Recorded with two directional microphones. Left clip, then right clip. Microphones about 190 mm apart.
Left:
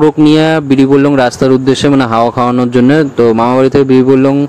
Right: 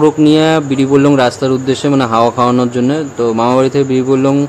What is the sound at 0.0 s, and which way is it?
A man's voice, 35° left (ahead or behind).